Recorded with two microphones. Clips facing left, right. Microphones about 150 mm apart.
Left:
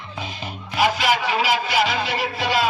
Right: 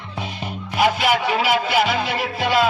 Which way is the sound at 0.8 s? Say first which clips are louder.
Right 2 dB; 55° right (ahead or behind).